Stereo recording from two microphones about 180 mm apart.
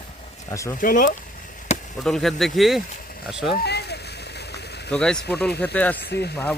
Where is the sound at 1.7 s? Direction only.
40° left (ahead or behind).